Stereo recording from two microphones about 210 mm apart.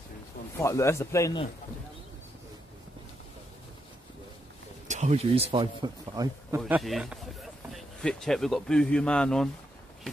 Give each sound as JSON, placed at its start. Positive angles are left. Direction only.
{"t": 0.6, "sound": "speech", "side_deg": 15}
{"t": 4.8, "sound": "speech", "side_deg": -35}
{"t": 6.6, "sound": "speech", "side_deg": 0}